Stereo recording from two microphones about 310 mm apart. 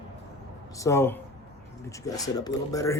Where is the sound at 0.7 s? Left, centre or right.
Centre.